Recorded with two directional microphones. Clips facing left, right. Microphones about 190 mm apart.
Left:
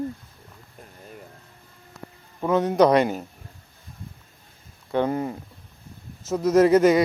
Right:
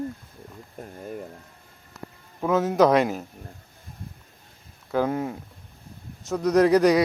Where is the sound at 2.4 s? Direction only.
Centre (ahead or behind).